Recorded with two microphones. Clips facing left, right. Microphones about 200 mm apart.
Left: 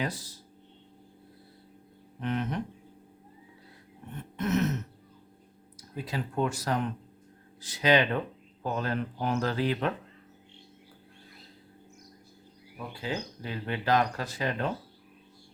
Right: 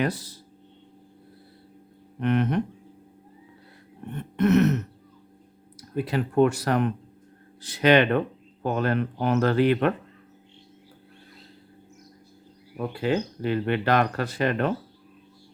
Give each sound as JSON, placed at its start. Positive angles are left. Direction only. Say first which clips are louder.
{"t": 0.0, "sound": "speech", "louder": "right 7 dB", "side_deg": -65}
{"t": 2.2, "sound": "speech", "louder": "right 8 dB", "side_deg": -65}
{"t": 4.1, "sound": "speech", "louder": "right 9 dB", "side_deg": -65}
{"t": 12.7, "sound": "speech", "louder": "right 10 dB", "side_deg": -65}